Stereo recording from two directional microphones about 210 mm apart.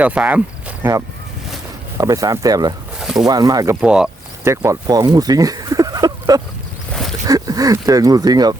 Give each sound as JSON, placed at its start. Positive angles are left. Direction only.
{"t": 0.0, "sound": "speech", "side_deg": -5}
{"t": 3.0, "sound": "a sound", "side_deg": 0}
{"t": 3.2, "sound": "speech", "side_deg": -15}
{"t": 3.8, "sound": "speech", "side_deg": -5}
{"t": 6.9, "sound": "wild animals", "side_deg": 0}
{"t": 7.3, "sound": "speech", "side_deg": -15}